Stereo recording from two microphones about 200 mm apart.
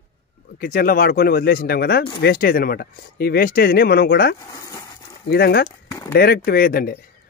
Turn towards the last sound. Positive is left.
turn(degrees=45)  # may be behind; listen again after turning